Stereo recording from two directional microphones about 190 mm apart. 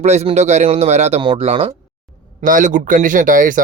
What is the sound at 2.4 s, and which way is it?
Speech, 40° right (ahead or behind).